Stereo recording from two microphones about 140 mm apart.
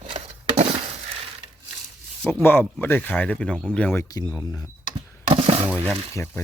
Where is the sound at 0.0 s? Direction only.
50° right (ahead or behind).